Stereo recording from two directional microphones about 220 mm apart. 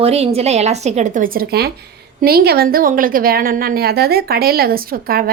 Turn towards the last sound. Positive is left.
turn(degrees=-40)  # may be behind; listen again after turning